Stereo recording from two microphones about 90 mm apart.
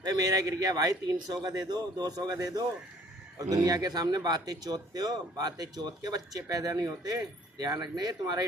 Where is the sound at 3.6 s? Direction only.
45° right (ahead or behind).